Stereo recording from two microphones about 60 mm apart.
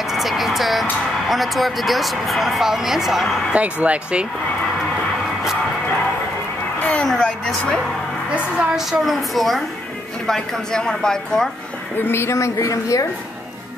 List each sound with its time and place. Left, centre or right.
0.1 s music: centre
1.3 s speech: centre
3.5 s speech: right
6.8 s a sound: left
7.1 s a sound: centre
8.4 s a woman's voice: centre
9.0 s speech: centre
12.0 s a woman's voice: left